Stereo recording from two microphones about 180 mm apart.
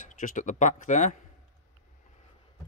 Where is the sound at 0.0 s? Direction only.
45° left (ahead or behind).